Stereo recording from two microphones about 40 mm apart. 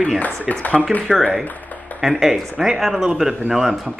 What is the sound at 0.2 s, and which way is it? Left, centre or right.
Speech, left.